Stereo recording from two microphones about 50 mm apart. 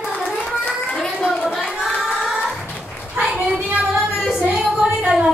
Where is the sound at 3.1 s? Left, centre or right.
Right.